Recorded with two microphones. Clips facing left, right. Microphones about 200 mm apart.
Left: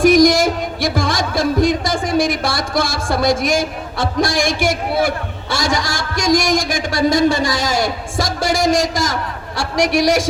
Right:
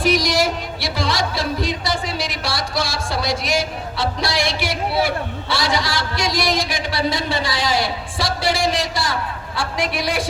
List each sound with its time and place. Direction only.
0.0 s music: 50° left (ahead or behind)
9.6 s a woman's voice: 80° left